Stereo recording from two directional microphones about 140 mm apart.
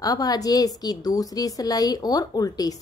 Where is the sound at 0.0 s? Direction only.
25° left (ahead or behind).